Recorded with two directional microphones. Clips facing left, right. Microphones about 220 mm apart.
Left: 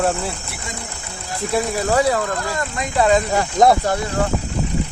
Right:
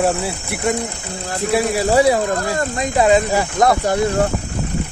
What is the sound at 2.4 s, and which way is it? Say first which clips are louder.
Speech: right 4 dB; 40° right (ahead or behind).